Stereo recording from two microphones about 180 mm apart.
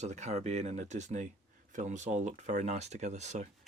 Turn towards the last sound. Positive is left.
turn(degrees=-40)  # may be behind; listen again after turning